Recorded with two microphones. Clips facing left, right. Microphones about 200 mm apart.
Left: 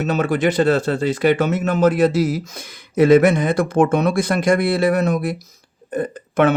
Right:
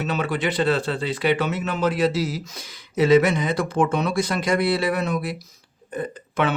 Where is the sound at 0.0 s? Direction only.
45° left (ahead or behind).